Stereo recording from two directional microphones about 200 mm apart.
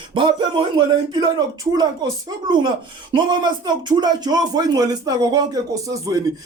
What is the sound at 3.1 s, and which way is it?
Speech, 20° right (ahead or behind).